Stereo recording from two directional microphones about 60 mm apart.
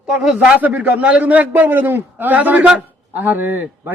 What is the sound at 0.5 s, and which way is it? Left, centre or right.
A man's voice, right.